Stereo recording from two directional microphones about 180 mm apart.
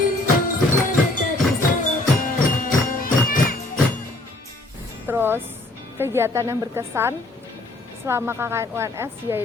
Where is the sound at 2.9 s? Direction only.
50° left (ahead or behind).